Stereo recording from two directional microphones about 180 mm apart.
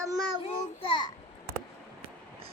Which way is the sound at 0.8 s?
25° left (ahead or behind).